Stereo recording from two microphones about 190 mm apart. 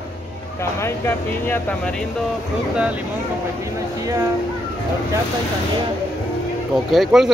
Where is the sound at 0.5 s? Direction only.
15° left (ahead or behind).